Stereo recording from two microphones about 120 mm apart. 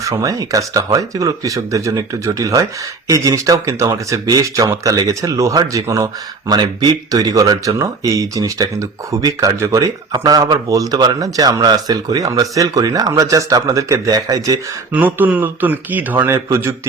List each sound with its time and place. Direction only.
0.0 s speech: 30° right (ahead or behind)
14.9 s speech: 15° right (ahead or behind)